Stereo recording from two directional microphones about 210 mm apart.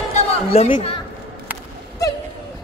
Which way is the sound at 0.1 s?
30° left (ahead or behind).